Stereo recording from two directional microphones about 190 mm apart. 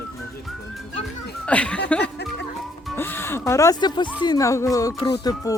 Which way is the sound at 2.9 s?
10° left (ahead or behind).